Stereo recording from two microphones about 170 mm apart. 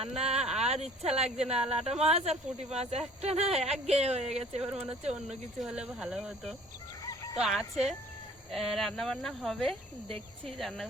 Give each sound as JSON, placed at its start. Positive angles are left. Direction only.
{"t": 0.2, "sound": "speech", "side_deg": -35}
{"t": 4.6, "sound": "speech", "side_deg": -5}